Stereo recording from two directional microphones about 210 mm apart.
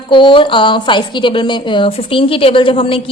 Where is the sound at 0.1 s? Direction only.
25° left (ahead or behind).